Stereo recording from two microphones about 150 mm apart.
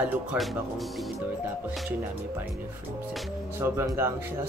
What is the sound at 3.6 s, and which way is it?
Speech, 20° right (ahead or behind).